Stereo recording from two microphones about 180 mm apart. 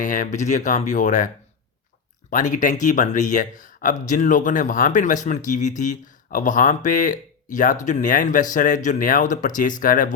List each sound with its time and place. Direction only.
0.0 s speech: 45° left (ahead or behind)
2.3 s speech: 45° left (ahead or behind)